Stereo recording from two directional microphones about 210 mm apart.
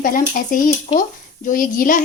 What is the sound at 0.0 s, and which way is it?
A woman's voice, 40° left (ahead or behind).